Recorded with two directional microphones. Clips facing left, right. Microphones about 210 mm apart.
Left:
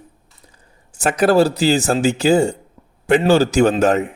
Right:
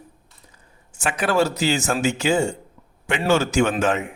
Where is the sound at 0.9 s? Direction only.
40° left (ahead or behind).